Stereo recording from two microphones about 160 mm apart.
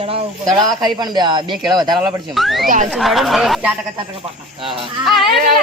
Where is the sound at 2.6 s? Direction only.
55° right (ahead or behind).